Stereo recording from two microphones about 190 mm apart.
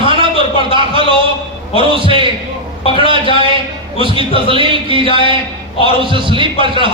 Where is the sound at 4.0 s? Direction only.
25° right (ahead or behind).